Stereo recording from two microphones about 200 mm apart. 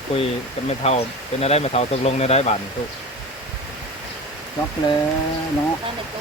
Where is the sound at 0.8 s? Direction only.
30° left (ahead or behind).